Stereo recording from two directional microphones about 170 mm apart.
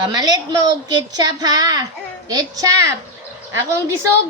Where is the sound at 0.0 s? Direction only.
20° right (ahead or behind).